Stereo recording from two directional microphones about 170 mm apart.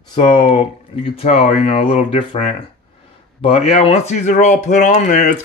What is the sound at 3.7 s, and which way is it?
Speech, 40° left (ahead or behind).